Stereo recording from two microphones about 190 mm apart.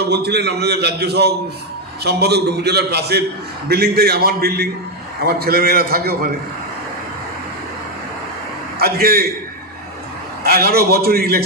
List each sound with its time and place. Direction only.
0.0 s a man's voice: 60° right (ahead or behind)
8.8 s a man's voice: 50° right (ahead or behind)
10.4 s a man's voice: 55° right (ahead or behind)